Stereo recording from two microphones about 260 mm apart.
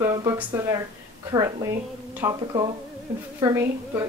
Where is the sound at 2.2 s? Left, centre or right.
Centre.